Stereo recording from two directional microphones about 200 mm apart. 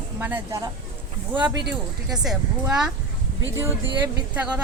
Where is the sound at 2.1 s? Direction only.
5° right (ahead or behind).